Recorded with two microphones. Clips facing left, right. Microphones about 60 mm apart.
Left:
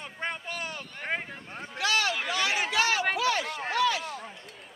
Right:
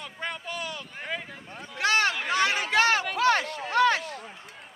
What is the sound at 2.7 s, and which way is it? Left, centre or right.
Chatter, right.